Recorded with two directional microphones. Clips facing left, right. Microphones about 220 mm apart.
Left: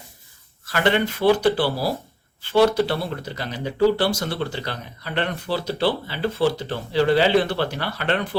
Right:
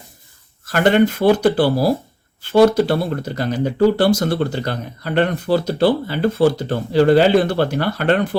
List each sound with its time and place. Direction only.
0.6 s speech: 45° right (ahead or behind)